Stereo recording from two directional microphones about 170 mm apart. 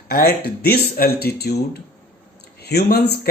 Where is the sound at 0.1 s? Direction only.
65° left (ahead or behind).